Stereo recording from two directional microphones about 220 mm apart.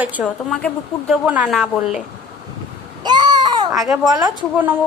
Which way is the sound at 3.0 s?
20° right (ahead or behind).